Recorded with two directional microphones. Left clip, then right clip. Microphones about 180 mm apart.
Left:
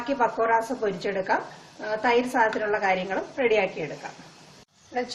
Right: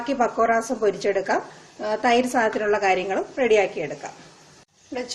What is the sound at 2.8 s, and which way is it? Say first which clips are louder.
Speech: right 3 dB; 50° right (ahead or behind).